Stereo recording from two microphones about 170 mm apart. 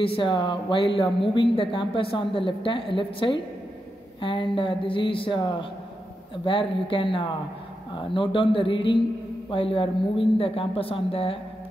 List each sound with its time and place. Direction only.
0.0 s speech: 30° left (ahead or behind)